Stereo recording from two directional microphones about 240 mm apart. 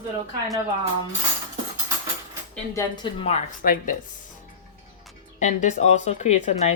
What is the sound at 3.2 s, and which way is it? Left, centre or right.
Speech, left.